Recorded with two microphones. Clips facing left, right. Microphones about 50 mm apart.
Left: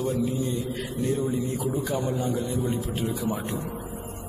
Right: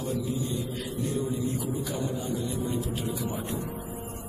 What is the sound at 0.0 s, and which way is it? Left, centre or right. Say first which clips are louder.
Mantra: left 4 dB; left.